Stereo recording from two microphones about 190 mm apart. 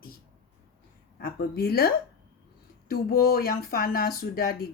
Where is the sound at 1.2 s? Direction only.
55° left (ahead or behind).